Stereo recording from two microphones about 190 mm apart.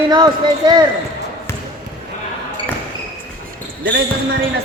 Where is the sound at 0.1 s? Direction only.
25° right (ahead or behind).